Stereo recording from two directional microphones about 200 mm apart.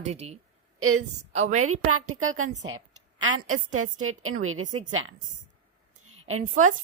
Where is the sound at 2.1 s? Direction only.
90° right.